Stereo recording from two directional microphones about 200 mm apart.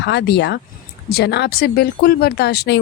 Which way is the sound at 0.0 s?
60° left (ahead or behind).